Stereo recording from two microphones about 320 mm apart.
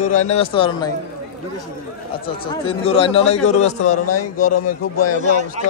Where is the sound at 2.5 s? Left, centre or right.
Centre.